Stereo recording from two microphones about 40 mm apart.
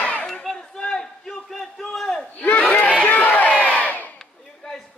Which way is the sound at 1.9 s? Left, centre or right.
Centre.